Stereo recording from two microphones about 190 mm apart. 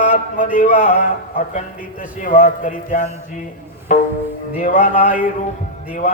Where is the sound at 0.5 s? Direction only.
45° left (ahead or behind).